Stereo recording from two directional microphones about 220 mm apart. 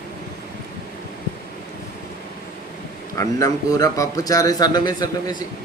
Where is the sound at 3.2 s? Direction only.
15° left (ahead or behind).